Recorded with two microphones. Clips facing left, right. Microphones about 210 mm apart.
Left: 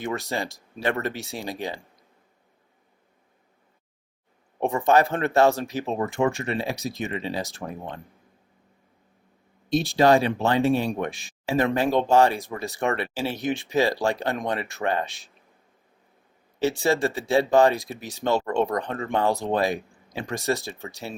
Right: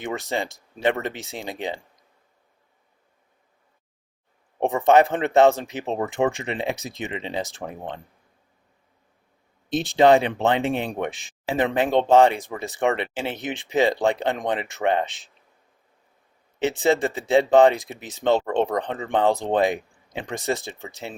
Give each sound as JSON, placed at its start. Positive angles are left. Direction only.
{"t": 0.0, "sound": "speech", "side_deg": -15}
{"t": 4.6, "sound": "speech", "side_deg": -20}
{"t": 9.7, "sound": "speech", "side_deg": -20}
{"t": 16.6, "sound": "speech", "side_deg": -20}